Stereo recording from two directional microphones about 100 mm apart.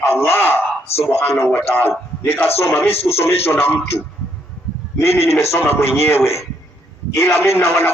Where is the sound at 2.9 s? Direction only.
80° left.